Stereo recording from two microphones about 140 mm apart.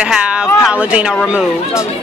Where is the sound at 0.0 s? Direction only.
5° right (ahead or behind).